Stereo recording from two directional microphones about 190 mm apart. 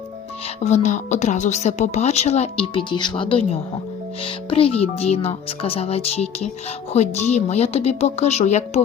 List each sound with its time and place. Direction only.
0.6 s a woman's voice: 35° left (ahead or behind)